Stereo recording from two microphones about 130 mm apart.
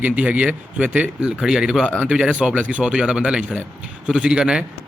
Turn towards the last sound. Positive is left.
turn(degrees=-5)  # may be behind; listen again after turning